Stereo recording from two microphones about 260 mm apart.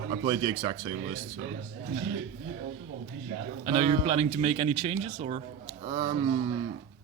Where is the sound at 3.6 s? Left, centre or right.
Right.